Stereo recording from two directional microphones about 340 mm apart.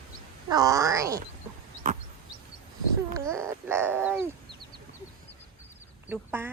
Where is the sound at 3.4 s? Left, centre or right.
Centre.